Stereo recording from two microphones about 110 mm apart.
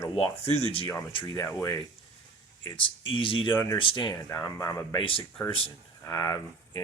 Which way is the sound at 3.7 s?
50° left (ahead or behind).